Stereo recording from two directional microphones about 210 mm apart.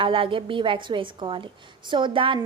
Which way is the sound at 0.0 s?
25° right (ahead or behind).